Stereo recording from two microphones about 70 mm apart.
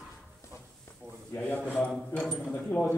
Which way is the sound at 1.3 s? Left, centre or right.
Left.